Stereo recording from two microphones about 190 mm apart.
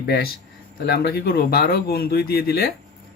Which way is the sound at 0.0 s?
55° left (ahead or behind).